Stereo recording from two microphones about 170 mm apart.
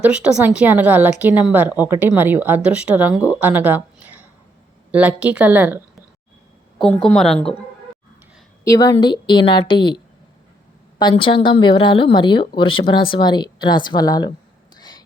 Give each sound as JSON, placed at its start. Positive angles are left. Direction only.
{"t": 0.0, "sound": "speech", "side_deg": -5}
{"t": 6.8, "sound": "a woman's voice", "side_deg": 5}
{"t": 8.6, "sound": "speech", "side_deg": 20}
{"t": 11.0, "sound": "speech", "side_deg": 30}
{"t": 14.8, "sound": "a sound", "side_deg": 25}